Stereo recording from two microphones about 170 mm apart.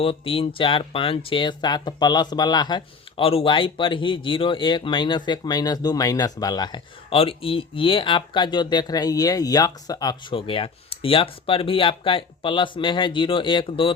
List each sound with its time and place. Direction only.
0.0 s speech: 35° left (ahead or behind)